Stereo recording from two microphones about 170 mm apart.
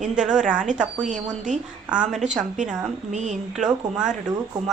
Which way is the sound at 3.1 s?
45° right (ahead or behind).